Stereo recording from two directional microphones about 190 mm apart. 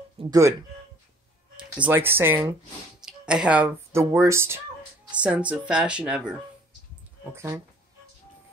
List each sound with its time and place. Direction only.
0.2 s speech: 15° right (ahead or behind)
1.8 s speech: 10° right (ahead or behind)
7.3 s speech: 15° right (ahead or behind)